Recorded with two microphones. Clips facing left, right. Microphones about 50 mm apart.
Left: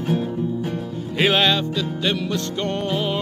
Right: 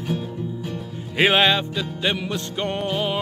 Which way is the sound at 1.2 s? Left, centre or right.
Centre.